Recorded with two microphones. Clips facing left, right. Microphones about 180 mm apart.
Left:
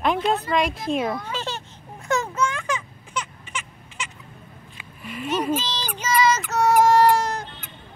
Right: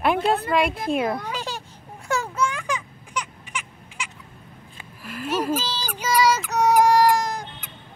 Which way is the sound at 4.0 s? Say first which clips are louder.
Even; 10° right (ahead or behind).